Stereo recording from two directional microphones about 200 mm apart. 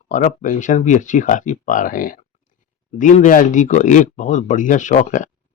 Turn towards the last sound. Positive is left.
turn(degrees=40)  # may be behind; listen again after turning